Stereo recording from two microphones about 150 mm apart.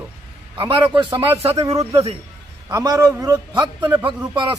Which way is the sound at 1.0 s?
15° right (ahead or behind).